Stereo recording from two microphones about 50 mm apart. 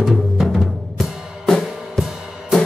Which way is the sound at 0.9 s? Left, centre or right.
Centre.